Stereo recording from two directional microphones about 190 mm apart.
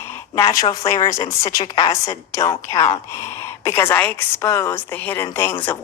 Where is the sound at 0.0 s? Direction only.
15° left (ahead or behind).